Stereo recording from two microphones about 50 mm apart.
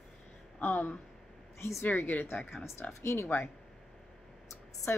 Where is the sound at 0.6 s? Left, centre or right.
Left.